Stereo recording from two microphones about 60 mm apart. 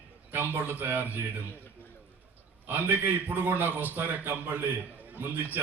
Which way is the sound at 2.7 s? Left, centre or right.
Right.